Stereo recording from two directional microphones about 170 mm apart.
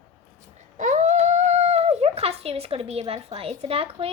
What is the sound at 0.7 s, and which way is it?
A child's voice, 45° right (ahead or behind).